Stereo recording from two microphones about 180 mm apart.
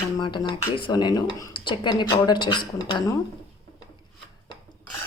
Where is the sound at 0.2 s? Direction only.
25° left (ahead or behind).